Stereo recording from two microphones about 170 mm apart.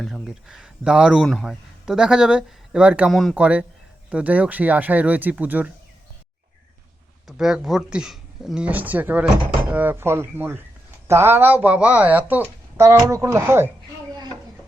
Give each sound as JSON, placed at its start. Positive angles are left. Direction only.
{"t": 0.0, "sound": "speech", "side_deg": 0}
{"t": 7.3, "sound": "speech", "side_deg": 0}
{"t": 14.1, "sound": "a sound", "side_deg": -25}